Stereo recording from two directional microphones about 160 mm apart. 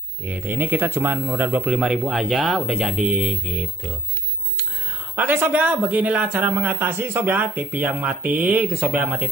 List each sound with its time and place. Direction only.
0.2 s speech: 10° right (ahead or behind)
5.1 s speech: 10° right (ahead or behind)